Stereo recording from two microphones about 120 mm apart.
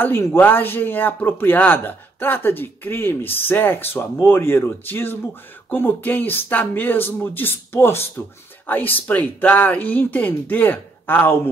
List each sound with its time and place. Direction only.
0.0 s a man's voice: 20° left (ahead or behind)